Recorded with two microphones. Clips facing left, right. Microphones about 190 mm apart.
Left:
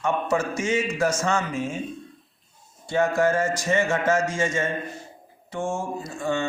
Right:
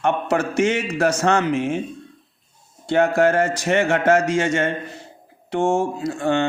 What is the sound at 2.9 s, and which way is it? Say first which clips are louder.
Speech: right 5 dB; 65° right (ahead or behind).